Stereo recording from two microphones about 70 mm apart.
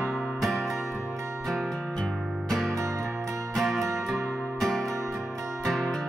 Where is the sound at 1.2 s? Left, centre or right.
Right.